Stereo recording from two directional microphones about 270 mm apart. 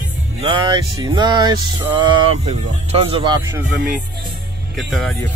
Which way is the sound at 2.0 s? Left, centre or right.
Centre.